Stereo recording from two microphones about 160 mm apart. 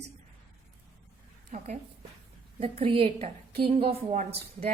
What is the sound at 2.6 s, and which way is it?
A woman's voice, 35° right (ahead or behind).